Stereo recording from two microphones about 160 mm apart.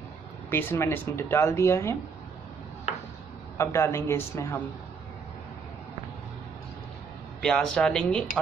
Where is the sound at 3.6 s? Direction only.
15° left (ahead or behind).